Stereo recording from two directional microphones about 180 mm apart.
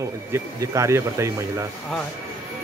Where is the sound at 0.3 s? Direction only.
15° right (ahead or behind).